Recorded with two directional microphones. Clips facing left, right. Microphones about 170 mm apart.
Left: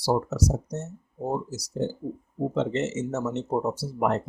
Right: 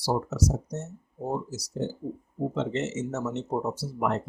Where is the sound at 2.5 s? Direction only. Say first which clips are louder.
Left 4 dB; 35° left (ahead or behind).